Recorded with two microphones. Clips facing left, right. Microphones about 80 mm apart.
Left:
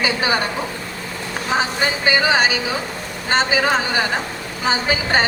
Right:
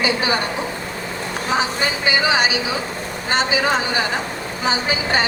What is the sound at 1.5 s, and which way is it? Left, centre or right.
Vehicle, left.